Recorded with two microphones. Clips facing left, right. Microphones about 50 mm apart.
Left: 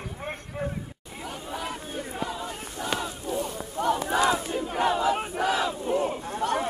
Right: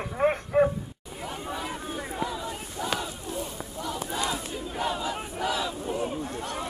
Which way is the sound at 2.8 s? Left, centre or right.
Left.